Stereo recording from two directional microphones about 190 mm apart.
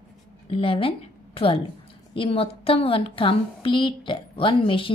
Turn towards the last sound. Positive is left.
turn(degrees=30)  # may be behind; listen again after turning